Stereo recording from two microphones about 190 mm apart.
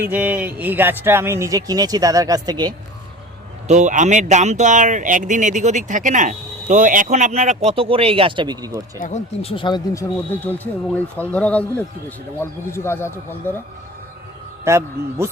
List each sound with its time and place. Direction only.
0.0 s speech: 10° right (ahead or behind)
3.7 s speech: 40° right (ahead or behind); by 8.8 s 20° right (ahead or behind)
9.0 s speech: 40° left (ahead or behind); by 13.6 s 10° left (ahead or behind)
14.6 s speech: 15° right (ahead or behind)